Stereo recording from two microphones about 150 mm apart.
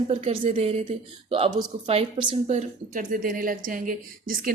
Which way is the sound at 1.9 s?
40° right (ahead or behind).